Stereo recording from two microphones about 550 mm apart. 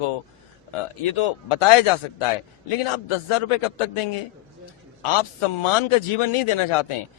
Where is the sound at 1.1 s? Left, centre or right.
Left.